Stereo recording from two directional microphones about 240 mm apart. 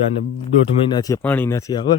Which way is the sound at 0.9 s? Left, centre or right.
Centre.